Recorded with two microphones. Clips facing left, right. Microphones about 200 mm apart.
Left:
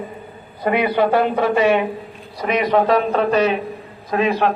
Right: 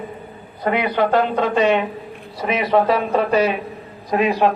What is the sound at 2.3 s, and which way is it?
A man's voice, 5° right (ahead or behind).